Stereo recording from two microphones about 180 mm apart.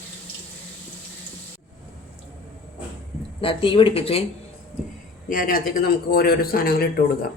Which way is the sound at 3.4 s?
30° left (ahead or behind).